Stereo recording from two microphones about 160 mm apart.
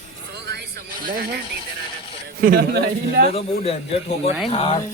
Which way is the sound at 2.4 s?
80° right.